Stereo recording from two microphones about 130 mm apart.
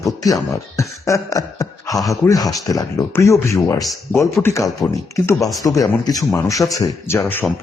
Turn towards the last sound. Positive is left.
turn(degrees=20)  # may be behind; listen again after turning